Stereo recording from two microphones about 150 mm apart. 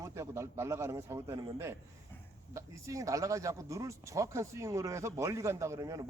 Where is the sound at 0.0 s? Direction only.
20° right (ahead or behind).